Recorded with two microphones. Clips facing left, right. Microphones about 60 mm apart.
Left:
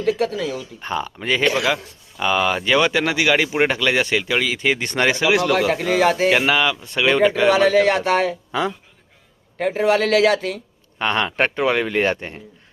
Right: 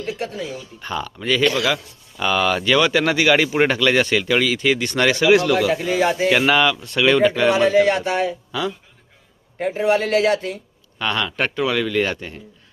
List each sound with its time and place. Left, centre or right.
0.0 s speech: left
0.5 s speech: left
5.4 s speech: left
5.7 s a man's voice: left
6.3 s speech: centre
6.8 s speech: centre
7.5 s speech: left
9.6 s speech: left
10.9 s speech: left